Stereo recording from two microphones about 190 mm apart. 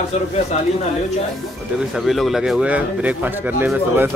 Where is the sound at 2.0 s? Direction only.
Centre (ahead or behind).